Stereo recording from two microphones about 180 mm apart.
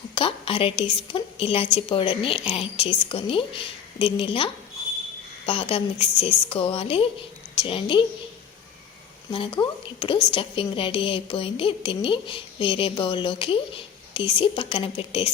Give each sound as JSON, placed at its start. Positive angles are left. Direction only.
{"t": 0.1, "sound": "a woman's voice", "side_deg": 30}
{"t": 9.3, "sound": "a woman's voice", "side_deg": 30}